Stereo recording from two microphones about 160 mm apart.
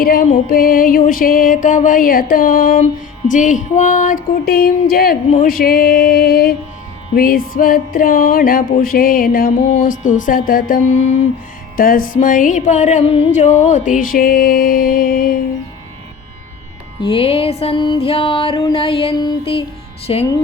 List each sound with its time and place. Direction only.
0.0 s music: 65° left (ahead or behind)
4.4 s music: 70° left (ahead or behind)
9.7 s music: 55° left (ahead or behind)
11.8 s music: 60° left (ahead or behind)
17.0 s music: 35° left (ahead or behind)